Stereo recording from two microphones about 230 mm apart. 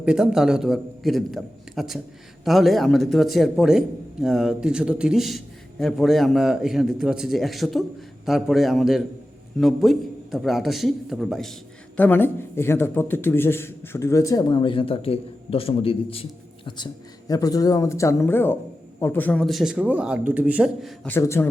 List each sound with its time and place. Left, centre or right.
0.0 s a man's voice: centre